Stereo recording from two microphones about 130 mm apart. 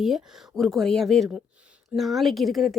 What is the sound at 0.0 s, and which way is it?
A woman's voice, centre (ahead or behind).